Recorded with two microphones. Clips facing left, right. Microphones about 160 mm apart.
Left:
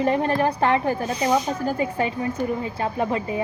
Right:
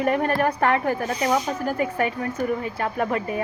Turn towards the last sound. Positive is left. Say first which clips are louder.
# left 1 dB
turn(degrees=20)  # may be behind; listen again after turning